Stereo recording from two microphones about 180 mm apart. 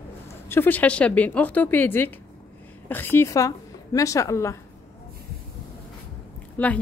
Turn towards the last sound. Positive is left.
turn(degrees=10)  # may be behind; listen again after turning